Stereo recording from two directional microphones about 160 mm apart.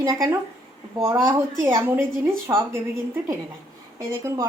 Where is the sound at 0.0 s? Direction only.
20° right (ahead or behind).